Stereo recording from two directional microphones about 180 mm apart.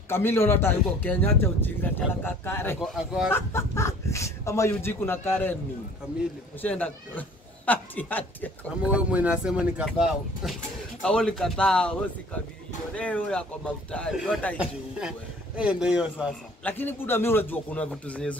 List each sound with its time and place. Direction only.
0.1 s speech: 10° left (ahead or behind)
2.8 s a man's voice: centre (ahead or behind)
3.3 s speech: 15° left (ahead or behind)
6.6 s speech: 10° left (ahead or behind)
8.9 s a man's voice: 10° right (ahead or behind)
16.6 s speech: 10° left (ahead or behind)